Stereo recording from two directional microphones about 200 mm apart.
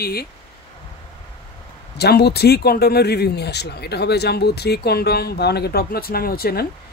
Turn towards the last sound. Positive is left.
turn(degrees=50)  # may be behind; listen again after turning